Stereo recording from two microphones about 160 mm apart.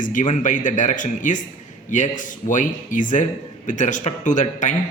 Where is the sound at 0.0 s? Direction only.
55° left (ahead or behind).